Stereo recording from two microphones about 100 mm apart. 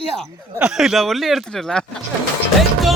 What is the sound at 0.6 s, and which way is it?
Speech, 5° right (ahead or behind).